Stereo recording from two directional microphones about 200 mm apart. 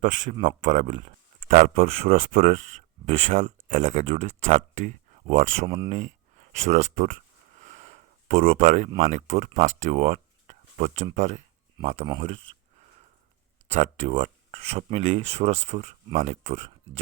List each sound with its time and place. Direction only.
0.0 s speech: 40° right (ahead or behind)
7.6 s a sound: 40° right (ahead or behind)
9.0 s speech: 35° right (ahead or behind)
13.7 s speech: 35° right (ahead or behind)